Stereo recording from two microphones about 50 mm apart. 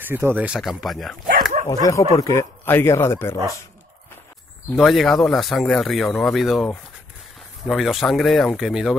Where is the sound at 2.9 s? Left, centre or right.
Left.